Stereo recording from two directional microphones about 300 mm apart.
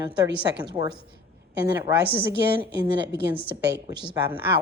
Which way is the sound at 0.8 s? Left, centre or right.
Centre.